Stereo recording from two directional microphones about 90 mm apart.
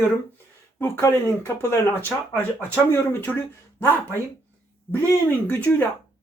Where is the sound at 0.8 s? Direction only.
25° left (ahead or behind).